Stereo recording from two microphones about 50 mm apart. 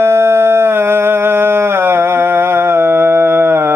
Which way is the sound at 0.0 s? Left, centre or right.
Right.